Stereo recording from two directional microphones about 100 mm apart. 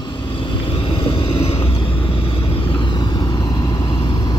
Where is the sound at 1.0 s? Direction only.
70° left (ahead or behind).